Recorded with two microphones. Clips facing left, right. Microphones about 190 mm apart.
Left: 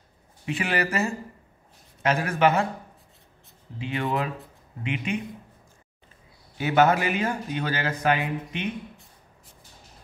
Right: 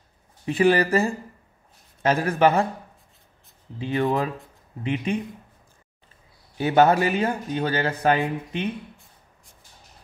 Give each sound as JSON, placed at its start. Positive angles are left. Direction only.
{"t": 0.5, "sound": "speech", "side_deg": -35}
{"t": 3.7, "sound": "speech", "side_deg": -35}
{"t": 6.6, "sound": "speech", "side_deg": -35}